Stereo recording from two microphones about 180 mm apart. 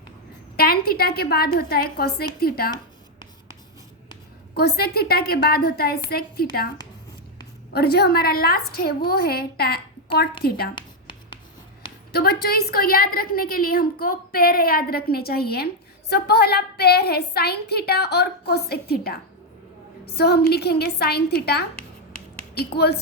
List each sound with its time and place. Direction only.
0.5 s a woman's voice: 60° left (ahead or behind)
4.5 s a woman's voice: 60° left (ahead or behind)
7.7 s a woman's voice: 60° left (ahead or behind)
12.1 s a woman's voice: 60° left (ahead or behind)
21.8 s a sound: 5° left (ahead or behind)
22.5 s a woman's voice: 65° left (ahead or behind)